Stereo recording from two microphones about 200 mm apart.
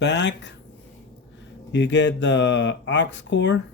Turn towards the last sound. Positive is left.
turn(degrees=60)  # may be behind; listen again after turning